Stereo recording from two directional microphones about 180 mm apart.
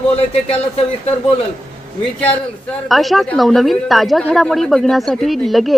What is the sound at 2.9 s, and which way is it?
A woman's voice, centre (ahead or behind).